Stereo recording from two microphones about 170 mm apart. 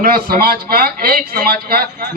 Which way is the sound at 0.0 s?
60° right (ahead or behind).